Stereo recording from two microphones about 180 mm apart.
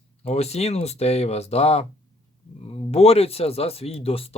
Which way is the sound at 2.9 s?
35° left (ahead or behind).